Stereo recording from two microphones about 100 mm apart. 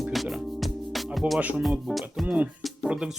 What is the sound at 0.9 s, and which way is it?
Music, centre (ahead or behind).